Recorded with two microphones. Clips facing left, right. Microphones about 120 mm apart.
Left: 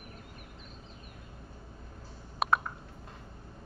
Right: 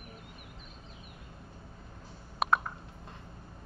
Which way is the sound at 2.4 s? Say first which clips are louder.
Even; centre (ahead or behind).